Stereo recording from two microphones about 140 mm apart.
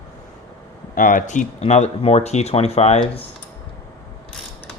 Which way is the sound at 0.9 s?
75° left (ahead or behind).